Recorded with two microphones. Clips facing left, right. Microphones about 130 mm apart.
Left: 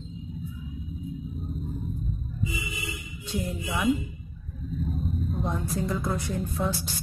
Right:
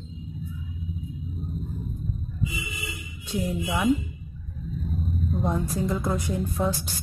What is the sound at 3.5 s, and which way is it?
Speech, 15° right (ahead or behind).